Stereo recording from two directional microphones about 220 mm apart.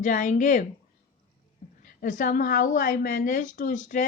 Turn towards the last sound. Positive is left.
turn(degrees=35)  # may be behind; listen again after turning